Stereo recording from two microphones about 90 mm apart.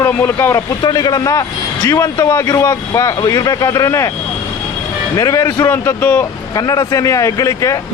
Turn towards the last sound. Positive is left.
turn(degrees=40)  # may be behind; listen again after turning